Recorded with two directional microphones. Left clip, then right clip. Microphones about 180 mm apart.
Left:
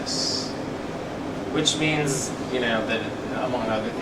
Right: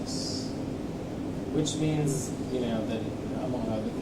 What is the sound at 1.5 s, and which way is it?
Speech, 25° left (ahead or behind).